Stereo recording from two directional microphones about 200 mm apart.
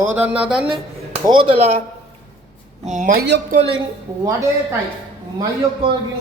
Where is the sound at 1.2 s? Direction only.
25° right (ahead or behind).